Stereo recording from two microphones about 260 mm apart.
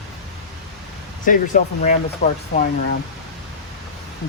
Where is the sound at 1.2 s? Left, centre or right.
Left.